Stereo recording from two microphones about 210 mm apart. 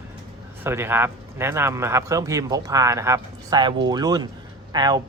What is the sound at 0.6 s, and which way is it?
Speech, 10° right (ahead or behind).